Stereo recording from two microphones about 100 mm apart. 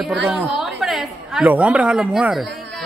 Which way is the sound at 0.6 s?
5° right (ahead or behind).